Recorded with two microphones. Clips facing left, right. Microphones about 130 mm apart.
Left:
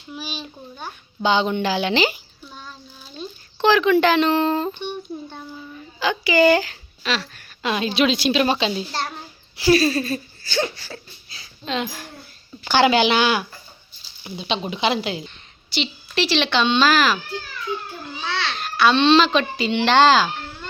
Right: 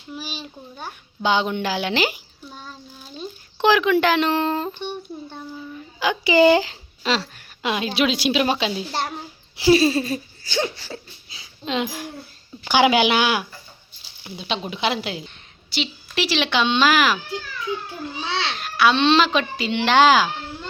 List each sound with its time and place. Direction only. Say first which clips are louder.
0.1 s a child's voice: left 1 dB; 5° right (ahead or behind)
1.6 s a sound: left 2 dB; 5° right (ahead or behind)
3.6 s speech: left 1 dB; 10° right (ahead or behind)
6.0 s a woman's voice: right 1 dB; 15° right (ahead or behind)
7.3 s a woman's voice: left 1 dB; 10° right (ahead or behind)
8.9 s a child's voice: right 1 dB; 20° right (ahead or behind)
9.6 s a sound: right 1 dB; 20° right (ahead or behind)
12.6 s a child's voice: even; 10° right (ahead or behind)
18.2 s babbling: even; 20° right (ahead or behind)
18.6 s speech: left 1 dB; 10° right (ahead or behind)